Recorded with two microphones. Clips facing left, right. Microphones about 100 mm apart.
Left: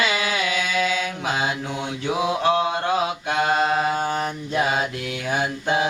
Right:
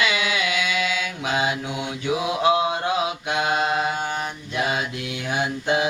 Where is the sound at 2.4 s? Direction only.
15° right (ahead or behind).